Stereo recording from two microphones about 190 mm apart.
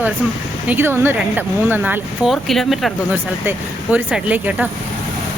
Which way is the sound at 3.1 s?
10° right (ahead or behind).